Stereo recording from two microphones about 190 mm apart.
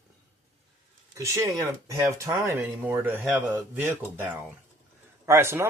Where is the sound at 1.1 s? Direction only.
15° right (ahead or behind).